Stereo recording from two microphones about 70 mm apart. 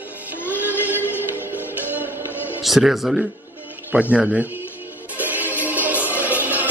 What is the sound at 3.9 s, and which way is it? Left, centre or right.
Speech, centre.